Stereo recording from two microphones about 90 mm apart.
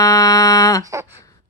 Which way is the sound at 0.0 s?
40° left (ahead or behind).